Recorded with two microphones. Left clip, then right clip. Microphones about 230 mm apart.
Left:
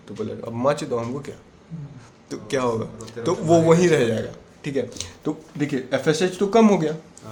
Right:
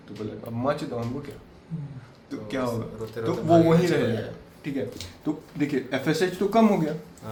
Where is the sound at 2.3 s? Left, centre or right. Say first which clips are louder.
Left 6 dB; left.